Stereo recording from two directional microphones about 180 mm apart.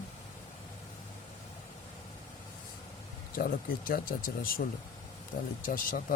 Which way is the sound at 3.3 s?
55° left (ahead or behind).